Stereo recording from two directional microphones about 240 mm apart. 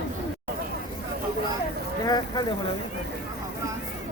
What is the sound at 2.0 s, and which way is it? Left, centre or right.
Speech, centre.